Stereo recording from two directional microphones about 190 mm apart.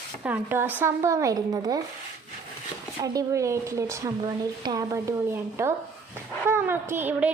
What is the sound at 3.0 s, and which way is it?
A woman's voice, 15° right (ahead or behind).